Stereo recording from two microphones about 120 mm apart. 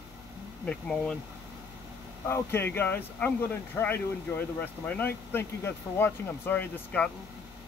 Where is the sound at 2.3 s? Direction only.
20° left (ahead or behind).